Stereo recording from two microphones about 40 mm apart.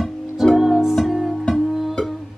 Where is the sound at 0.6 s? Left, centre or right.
Centre.